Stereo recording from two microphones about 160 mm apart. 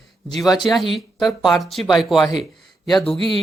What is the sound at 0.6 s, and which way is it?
Speech, centre (ahead or behind).